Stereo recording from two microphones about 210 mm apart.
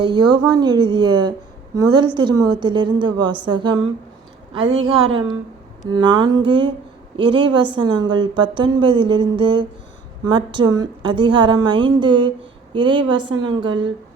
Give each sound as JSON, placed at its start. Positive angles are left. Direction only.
{"t": 0.0, "sound": "a woman's voice", "side_deg": -20}
{"t": 4.7, "sound": "a woman's voice", "side_deg": -70}
{"t": 5.8, "sound": "a woman's voice", "side_deg": -20}